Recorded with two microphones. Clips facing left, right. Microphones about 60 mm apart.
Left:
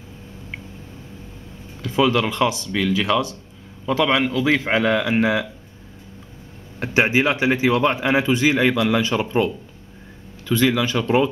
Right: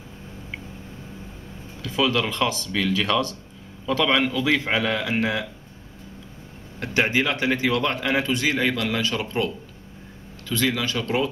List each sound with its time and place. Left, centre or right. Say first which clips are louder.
1.8 s speech: left 4 dB; left; by 4.5 s centre
4.5 s a man's voice: left 4 dB; centre
6.8 s a man's voice: left 4 dB; centre
10.5 s a man's voice: left 5 dB; left